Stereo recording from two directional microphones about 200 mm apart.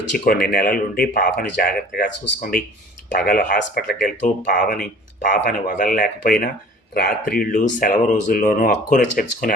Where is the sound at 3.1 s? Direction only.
45° left (ahead or behind).